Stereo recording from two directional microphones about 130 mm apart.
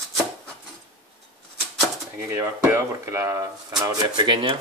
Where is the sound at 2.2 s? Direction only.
20° right (ahead or behind); by 4.6 s 40° right (ahead or behind).